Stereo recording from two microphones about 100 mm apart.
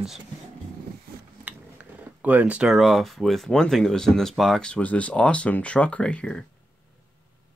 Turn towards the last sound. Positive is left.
turn(degrees=10)  # may be behind; listen again after turning